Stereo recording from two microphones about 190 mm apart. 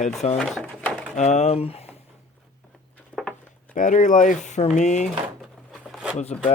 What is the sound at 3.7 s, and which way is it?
Speech, 40° left (ahead or behind).